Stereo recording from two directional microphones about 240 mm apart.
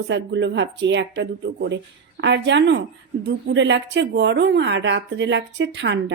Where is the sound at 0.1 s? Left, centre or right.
Right.